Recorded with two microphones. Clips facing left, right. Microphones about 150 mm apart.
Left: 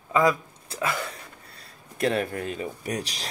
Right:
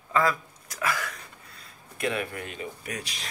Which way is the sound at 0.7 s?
25° left (ahead or behind).